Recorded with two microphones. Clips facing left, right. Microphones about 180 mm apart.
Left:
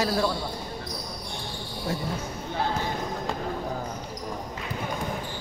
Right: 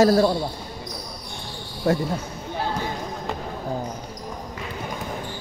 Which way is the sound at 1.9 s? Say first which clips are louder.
Right 10 dB; 60° right (ahead or behind).